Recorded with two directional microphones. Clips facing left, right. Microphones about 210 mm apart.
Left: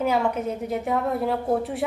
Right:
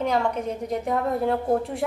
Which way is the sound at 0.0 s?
5° left (ahead or behind).